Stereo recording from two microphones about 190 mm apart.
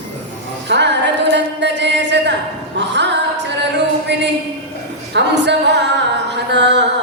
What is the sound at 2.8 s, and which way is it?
Singing, 65° right (ahead or behind).